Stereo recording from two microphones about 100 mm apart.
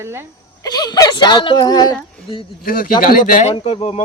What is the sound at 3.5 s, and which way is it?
Speech, 80° left.